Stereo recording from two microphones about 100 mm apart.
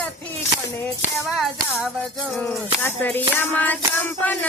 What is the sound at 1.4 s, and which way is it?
Music, 5° right (ahead or behind).